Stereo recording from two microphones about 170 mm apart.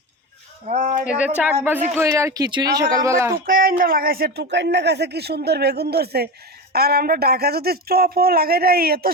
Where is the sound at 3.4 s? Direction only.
60° right (ahead or behind).